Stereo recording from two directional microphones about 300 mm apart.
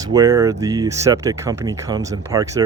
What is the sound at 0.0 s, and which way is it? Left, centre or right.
Speech, centre.